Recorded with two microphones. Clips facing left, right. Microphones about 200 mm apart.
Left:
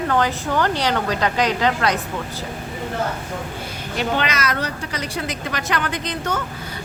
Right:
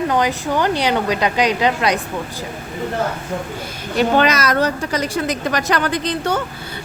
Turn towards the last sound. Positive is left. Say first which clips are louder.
# right 5 dB
turn(degrees=-35)  # may be behind; listen again after turning